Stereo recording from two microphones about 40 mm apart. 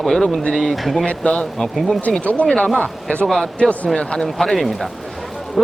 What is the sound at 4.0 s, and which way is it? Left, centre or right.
Speech, left.